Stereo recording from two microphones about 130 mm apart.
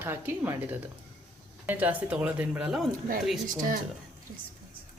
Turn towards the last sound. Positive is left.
turn(degrees=-90)